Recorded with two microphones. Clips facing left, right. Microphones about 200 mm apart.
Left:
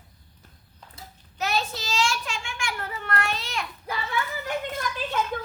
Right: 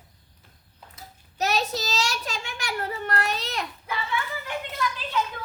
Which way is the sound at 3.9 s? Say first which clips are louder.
Left 1 dB; 40° left (ahead or behind).